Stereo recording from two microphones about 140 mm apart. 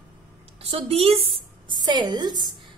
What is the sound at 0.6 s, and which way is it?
Speech, 45° right (ahead or behind).